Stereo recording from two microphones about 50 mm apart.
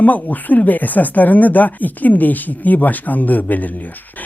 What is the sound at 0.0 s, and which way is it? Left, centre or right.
Speech, left.